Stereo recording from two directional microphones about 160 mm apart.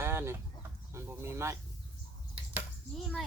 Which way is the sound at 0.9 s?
15° right (ahead or behind).